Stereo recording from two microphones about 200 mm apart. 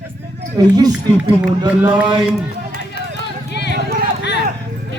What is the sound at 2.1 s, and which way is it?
Speech, centre (ahead or behind).